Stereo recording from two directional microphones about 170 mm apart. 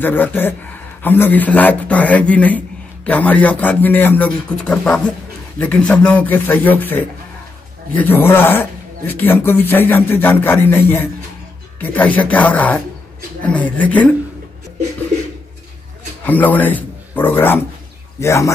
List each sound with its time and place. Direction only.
0.0 s a man's voice: 10° left (ahead or behind)
16.3 s a man's voice: 10° left (ahead or behind)